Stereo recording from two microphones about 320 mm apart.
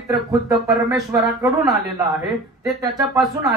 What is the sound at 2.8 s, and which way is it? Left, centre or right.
Speech, centre.